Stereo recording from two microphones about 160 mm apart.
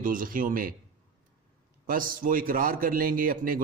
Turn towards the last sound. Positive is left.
turn(degrees=-60)  # may be behind; listen again after turning